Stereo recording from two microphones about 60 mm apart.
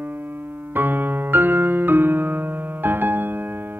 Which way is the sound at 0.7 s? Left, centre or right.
Right.